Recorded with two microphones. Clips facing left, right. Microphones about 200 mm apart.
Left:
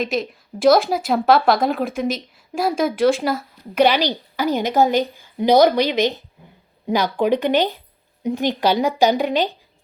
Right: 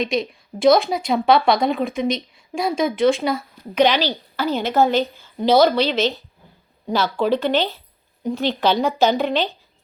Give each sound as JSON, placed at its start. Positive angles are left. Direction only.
{"t": 0.0, "sound": "speech", "side_deg": 5}